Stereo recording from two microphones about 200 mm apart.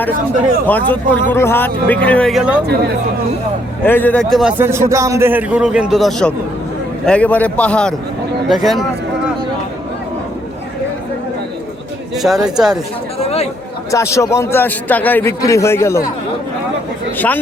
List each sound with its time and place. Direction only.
0.7 s a man's voice: 10° left (ahead or behind)
3.8 s a man's voice: 10° left (ahead or behind)
12.1 s a man's voice: centre (ahead or behind)
13.2 s a sound: 30° left (ahead or behind)
13.9 s a man's voice: 15° left (ahead or behind)
17.2 s a man's voice: 10° left (ahead or behind)